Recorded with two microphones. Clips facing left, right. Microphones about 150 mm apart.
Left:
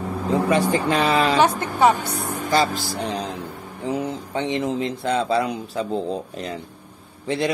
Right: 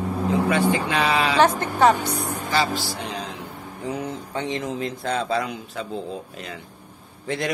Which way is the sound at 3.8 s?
25° left (ahead or behind).